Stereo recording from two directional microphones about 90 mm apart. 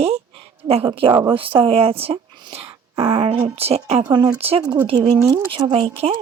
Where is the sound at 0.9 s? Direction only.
75° right (ahead or behind).